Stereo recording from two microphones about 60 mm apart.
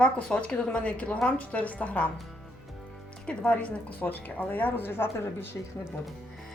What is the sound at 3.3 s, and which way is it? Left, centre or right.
A woman's voice, centre.